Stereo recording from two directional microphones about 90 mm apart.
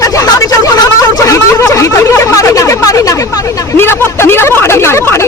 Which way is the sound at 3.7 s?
25° left (ahead or behind).